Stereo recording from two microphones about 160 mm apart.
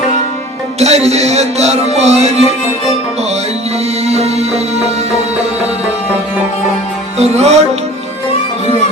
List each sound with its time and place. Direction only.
0.8 s music: 45° right (ahead or behind)
4.0 s music: 40° right (ahead or behind)
7.2 s music: 45° right (ahead or behind)